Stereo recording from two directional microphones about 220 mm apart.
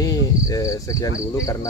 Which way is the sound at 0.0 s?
15° left (ahead or behind).